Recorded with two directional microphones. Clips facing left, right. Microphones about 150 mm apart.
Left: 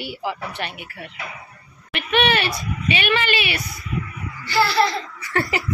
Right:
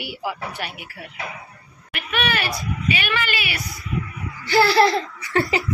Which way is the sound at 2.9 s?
25° left (ahead or behind).